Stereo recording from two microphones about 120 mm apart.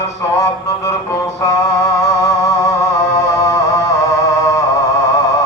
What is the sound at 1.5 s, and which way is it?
Music, 25° left (ahead or behind).